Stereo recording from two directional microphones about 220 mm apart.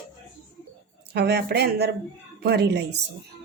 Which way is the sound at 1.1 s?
50° right (ahead or behind).